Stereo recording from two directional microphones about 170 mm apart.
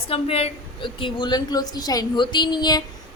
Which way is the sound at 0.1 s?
35° left (ahead or behind).